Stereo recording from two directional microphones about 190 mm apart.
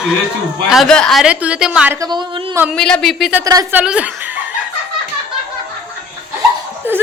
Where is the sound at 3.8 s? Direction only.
5° right (ahead or behind).